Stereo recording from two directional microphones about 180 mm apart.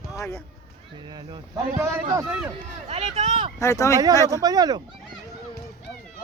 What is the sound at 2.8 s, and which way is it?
Speech, 40° right (ahead or behind).